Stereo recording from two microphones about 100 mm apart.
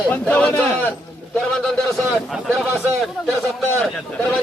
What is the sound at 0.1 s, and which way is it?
Speech, 15° left (ahead or behind).